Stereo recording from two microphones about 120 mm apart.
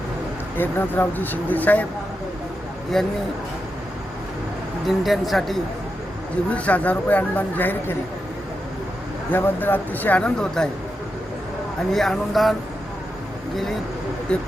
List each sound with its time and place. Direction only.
0.5 s speech: 15° left (ahead or behind)
2.9 s speech: 5° left (ahead or behind)
4.9 s speech: centre (ahead or behind)
6.5 s speech: 10° left (ahead or behind)
9.3 s speech: 15° left (ahead or behind)
11.9 s speech: 5° left (ahead or behind)
14.3 s speech: 10° left (ahead or behind)